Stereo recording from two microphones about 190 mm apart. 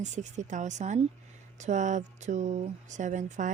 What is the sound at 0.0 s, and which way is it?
Speech, 40° right (ahead or behind).